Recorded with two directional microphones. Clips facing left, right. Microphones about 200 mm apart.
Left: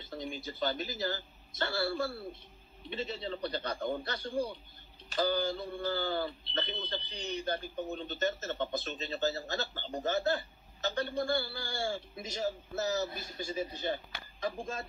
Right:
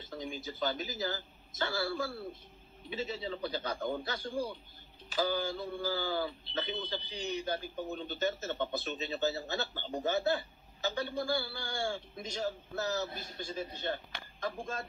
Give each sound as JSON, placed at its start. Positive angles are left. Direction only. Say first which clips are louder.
{"t": 0.1, "sound": "a man's voice", "louder": "left 1 dB", "side_deg": 0}